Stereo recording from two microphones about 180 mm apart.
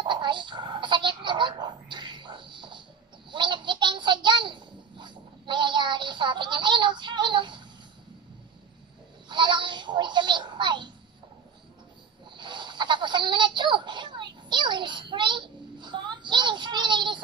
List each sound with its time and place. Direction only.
0.0 s a child's voice: 25° right (ahead or behind)
9.3 s a child's voice: 25° right (ahead or behind)
12.4 s a sound: 25° right (ahead or behind)